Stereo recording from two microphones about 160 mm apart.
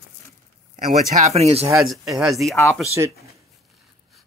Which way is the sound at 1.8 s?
Centre (ahead or behind).